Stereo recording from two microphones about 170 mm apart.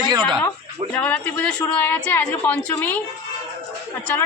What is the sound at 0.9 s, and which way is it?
Speech, 10° left (ahead or behind).